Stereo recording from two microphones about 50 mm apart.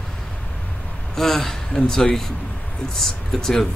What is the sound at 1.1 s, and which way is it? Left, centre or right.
Speech, centre.